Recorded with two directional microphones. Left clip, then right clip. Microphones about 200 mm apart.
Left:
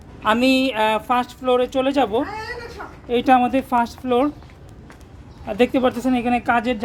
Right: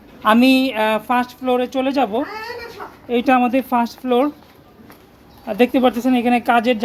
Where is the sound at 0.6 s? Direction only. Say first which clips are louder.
Right 1 dB; 10° left (ahead or behind).